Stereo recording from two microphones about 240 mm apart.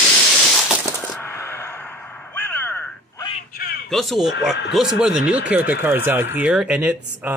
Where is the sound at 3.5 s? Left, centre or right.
Left.